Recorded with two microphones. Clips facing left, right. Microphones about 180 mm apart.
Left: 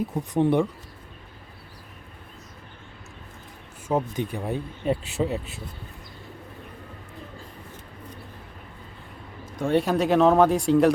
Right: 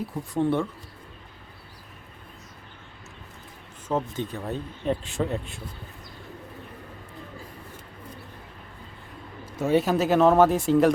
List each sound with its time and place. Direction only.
0.1 s speech: 20° left (ahead or behind)
3.8 s speech: 10° left (ahead or behind)
9.6 s speech: 5° right (ahead or behind)